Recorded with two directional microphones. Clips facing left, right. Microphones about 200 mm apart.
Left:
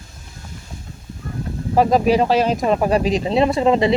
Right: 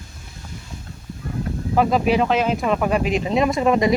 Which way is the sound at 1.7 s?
40° left (ahead or behind).